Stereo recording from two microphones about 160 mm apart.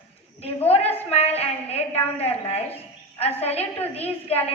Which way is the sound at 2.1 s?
40° left (ahead or behind).